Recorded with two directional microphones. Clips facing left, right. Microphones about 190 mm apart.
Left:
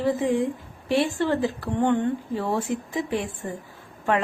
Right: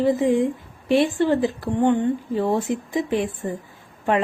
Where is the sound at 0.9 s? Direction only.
15° right (ahead or behind).